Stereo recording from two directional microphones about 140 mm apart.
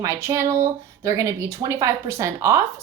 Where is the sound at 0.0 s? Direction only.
20° right (ahead or behind).